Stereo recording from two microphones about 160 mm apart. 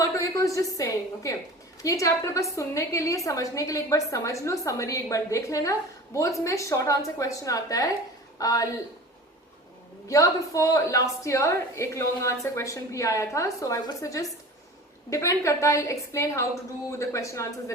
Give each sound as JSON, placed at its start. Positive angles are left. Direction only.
{"t": 0.0, "sound": "a woman's voice", "side_deg": 20}
{"t": 10.1, "sound": "a woman's voice", "side_deg": 20}